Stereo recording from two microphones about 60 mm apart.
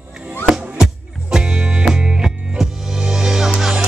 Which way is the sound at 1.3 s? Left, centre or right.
Centre.